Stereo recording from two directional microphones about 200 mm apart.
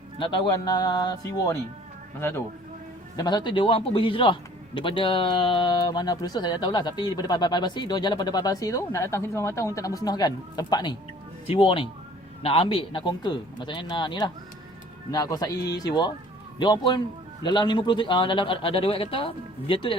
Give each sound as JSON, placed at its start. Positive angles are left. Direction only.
{"t": 0.2, "sound": "a man's voice", "side_deg": 25}
{"t": 3.2, "sound": "a man's voice", "side_deg": 20}